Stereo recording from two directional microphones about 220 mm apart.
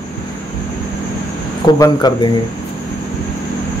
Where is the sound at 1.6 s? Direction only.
15° left (ahead or behind).